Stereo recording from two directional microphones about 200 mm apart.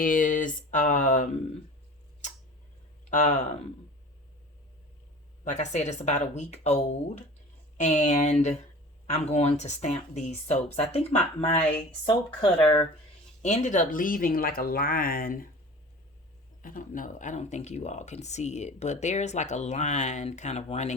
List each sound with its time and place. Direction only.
0.0 s speech: 45° left (ahead or behind)
3.1 s speech: 35° left (ahead or behind)
5.5 s speech: 35° left (ahead or behind)
16.6 s speech: 45° left (ahead or behind)